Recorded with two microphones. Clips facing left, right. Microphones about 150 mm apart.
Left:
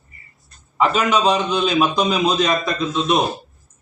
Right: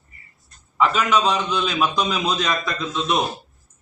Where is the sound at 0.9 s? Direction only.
15° left (ahead or behind).